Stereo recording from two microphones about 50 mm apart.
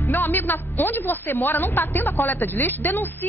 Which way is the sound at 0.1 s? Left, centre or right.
Left.